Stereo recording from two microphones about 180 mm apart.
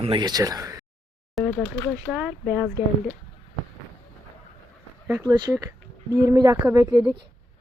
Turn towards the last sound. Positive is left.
turn(degrees=-15)  # may be behind; listen again after turning